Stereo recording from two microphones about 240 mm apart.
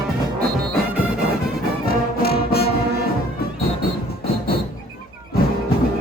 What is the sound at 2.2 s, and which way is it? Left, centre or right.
Music, left.